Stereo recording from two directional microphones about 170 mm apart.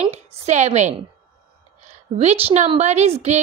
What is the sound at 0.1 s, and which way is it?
A woman's voice, 40° right (ahead or behind).